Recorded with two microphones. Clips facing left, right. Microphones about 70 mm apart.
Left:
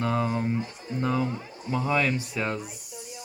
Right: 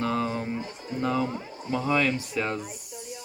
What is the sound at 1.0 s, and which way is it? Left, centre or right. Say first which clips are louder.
Speech: even; centre.